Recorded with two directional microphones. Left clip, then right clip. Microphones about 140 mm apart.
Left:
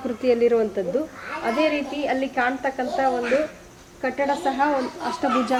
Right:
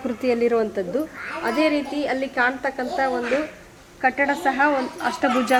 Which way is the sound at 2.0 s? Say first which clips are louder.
Even; 10° right (ahead or behind).